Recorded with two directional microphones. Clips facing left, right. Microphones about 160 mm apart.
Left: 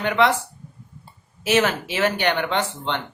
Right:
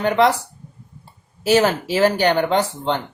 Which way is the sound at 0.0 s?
35° right (ahead or behind).